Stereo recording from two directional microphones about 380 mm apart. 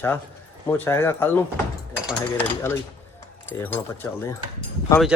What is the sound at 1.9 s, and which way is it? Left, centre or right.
Mechanisms, centre.